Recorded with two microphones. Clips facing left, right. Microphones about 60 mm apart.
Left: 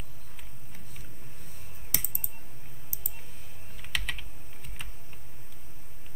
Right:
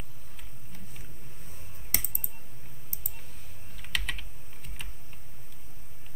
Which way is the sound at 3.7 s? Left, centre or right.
Centre.